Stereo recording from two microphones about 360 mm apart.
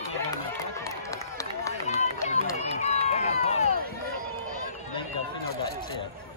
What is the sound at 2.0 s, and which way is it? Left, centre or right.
Run, centre.